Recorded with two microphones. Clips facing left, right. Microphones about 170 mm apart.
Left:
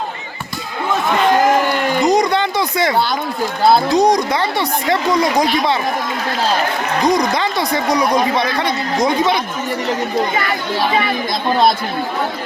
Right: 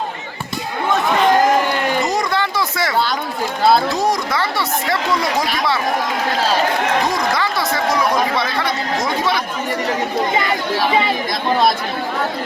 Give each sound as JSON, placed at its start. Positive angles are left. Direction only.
{"t": 2.0, "sound": "a sound", "side_deg": 20}
{"t": 3.8, "sound": "speech", "side_deg": 20}
{"t": 7.1, "sound": "speech", "side_deg": 20}